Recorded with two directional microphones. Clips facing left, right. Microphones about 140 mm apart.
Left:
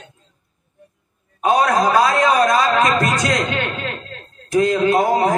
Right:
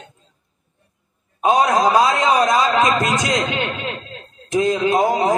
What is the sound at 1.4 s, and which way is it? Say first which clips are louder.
A man's voice: even; 15° right (ahead or behind).